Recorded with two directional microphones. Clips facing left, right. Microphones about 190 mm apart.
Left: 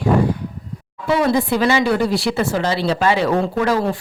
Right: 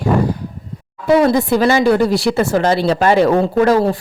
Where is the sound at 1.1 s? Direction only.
40° right (ahead or behind).